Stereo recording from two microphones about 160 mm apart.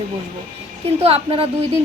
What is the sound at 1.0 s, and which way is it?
Speech, 35° right (ahead or behind).